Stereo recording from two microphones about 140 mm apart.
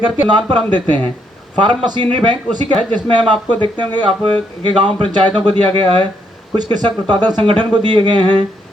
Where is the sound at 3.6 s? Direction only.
35° right (ahead or behind).